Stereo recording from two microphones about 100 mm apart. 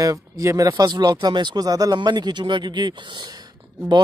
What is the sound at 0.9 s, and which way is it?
Speech, 45° right (ahead or behind).